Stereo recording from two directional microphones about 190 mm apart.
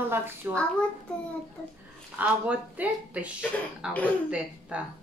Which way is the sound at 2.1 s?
10° right (ahead or behind).